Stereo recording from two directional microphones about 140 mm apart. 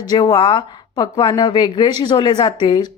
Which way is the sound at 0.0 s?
30° left (ahead or behind).